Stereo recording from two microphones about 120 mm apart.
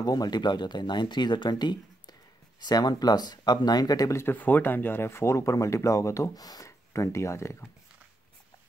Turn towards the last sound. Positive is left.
turn(degrees=25)  # may be behind; listen again after turning